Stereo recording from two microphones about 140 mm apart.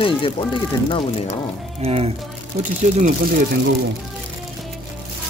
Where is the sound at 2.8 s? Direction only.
60° right (ahead or behind).